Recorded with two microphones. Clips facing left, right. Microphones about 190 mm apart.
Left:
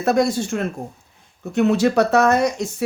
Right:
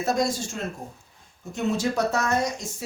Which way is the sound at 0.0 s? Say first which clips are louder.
Left 7 dB; 60° left (ahead or behind).